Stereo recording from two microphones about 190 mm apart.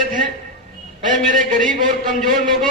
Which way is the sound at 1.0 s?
45° right (ahead or behind).